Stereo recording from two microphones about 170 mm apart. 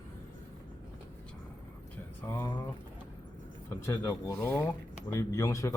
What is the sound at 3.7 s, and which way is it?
A man's voice, 15° left (ahead or behind).